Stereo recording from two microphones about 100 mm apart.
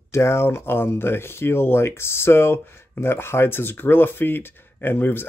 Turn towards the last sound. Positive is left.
turn(degrees=20)  # may be behind; listen again after turning